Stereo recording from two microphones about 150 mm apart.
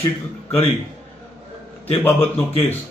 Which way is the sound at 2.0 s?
15° left (ahead or behind).